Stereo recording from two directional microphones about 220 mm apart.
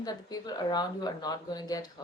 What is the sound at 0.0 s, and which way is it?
Speech, 20° left (ahead or behind).